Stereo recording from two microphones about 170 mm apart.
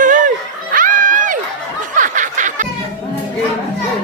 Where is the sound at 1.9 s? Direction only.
50° right (ahead or behind).